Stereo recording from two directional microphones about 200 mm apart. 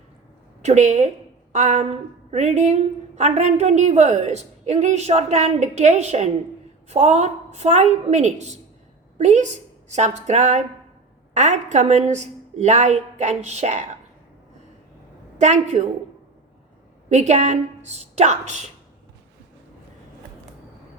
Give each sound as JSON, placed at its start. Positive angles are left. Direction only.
{"t": 0.6, "sound": "a woman's voice", "side_deg": -35}
{"t": 15.4, "sound": "a woman's voice", "side_deg": -35}
{"t": 17.1, "sound": "a woman's voice", "side_deg": -35}